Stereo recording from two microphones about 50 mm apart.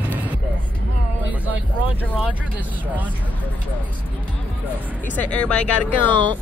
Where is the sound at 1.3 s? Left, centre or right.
Right.